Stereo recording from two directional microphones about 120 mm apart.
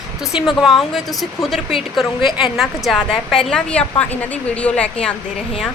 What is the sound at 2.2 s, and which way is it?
Speech, 45° left (ahead or behind).